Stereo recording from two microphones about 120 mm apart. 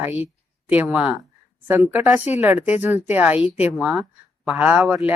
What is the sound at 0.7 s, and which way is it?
Speech, 10° right (ahead or behind).